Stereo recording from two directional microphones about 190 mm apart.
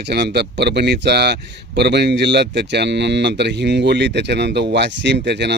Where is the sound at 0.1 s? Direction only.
60° right (ahead or behind).